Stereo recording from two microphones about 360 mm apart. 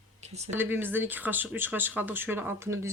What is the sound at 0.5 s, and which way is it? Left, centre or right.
Speech, centre.